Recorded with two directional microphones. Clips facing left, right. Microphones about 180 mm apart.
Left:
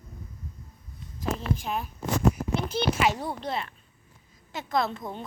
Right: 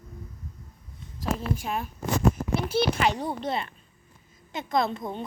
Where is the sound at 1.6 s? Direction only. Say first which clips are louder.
Right 1 dB; centre (ahead or behind).